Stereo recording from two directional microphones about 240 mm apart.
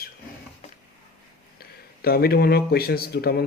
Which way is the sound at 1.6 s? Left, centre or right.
Left.